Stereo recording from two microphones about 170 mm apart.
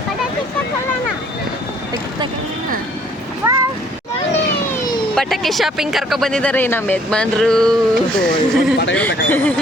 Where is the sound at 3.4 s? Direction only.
15° right (ahead or behind).